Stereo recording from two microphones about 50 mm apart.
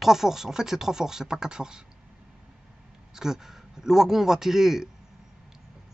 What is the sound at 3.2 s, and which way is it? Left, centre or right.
Speech, centre.